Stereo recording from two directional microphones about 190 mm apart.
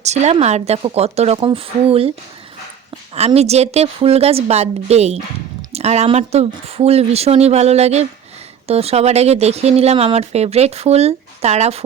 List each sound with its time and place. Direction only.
0.0 s speech: 35° right (ahead or behind)
3.2 s speech: 35° right (ahead or behind)